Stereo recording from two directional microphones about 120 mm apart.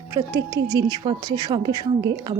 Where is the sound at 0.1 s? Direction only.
25° right (ahead or behind).